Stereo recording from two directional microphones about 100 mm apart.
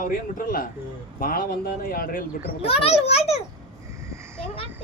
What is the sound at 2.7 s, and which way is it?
Speech, 80° left.